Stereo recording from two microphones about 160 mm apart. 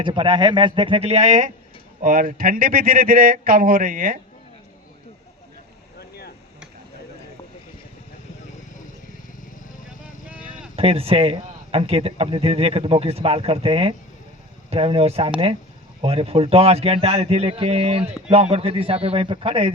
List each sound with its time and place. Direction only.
0.0 s a man's voice: 30° right (ahead or behind); by 4.2 s 60° right (ahead or behind)
6.0 s chop: 85° left
10.8 s a man's voice: 35° right (ahead or behind)